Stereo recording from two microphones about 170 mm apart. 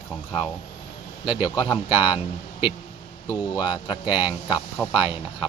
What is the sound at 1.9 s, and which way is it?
Speech, 30° left (ahead or behind).